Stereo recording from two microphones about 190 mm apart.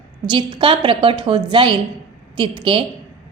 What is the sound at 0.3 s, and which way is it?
A woman's voice, 25° right (ahead or behind).